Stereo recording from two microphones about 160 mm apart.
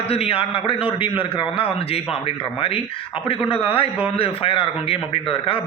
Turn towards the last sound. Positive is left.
turn(degrees=35)  # may be behind; listen again after turning